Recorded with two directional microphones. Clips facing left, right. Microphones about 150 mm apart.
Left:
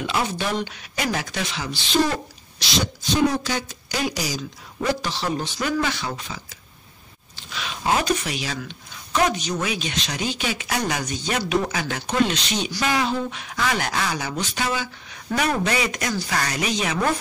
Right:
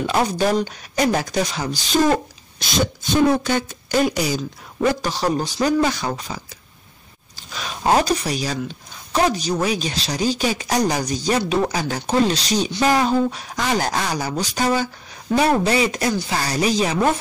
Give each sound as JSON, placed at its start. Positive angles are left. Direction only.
{"t": 0.0, "sound": "speech", "side_deg": -40}
{"t": 5.0, "sound": "speech", "side_deg": -40}